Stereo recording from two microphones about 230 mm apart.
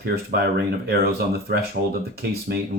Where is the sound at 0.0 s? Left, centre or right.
Right.